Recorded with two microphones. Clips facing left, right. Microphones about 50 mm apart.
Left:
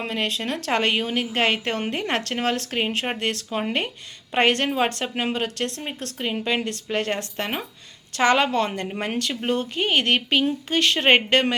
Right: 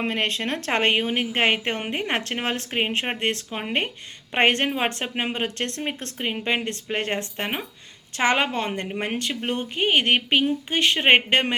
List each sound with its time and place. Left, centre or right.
0.0 s a woman's voice: right